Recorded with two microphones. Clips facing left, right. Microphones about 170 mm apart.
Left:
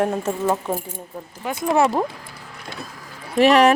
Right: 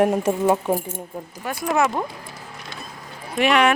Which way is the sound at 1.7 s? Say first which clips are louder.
Left 3 dB; 30° left (ahead or behind).